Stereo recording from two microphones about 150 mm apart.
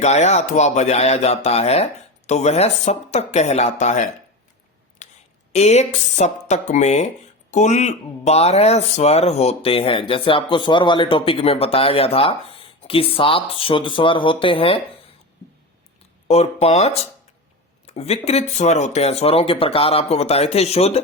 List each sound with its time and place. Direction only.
0.0 s speech: 50° left (ahead or behind)
5.0 s a sound: 50° left (ahead or behind)
5.5 s speech: 45° left (ahead or behind)
16.2 s speech: 45° left (ahead or behind)